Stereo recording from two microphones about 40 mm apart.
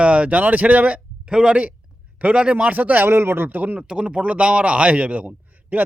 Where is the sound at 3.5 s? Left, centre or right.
Right.